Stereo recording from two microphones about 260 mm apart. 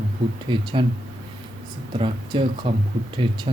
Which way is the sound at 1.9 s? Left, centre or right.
Centre.